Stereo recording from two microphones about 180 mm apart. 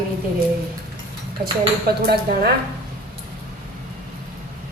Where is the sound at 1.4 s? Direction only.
60° right (ahead or behind).